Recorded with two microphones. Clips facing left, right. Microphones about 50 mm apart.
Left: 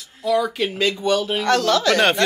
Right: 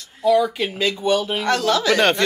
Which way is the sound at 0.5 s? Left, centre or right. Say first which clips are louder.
Left 1 dB; centre.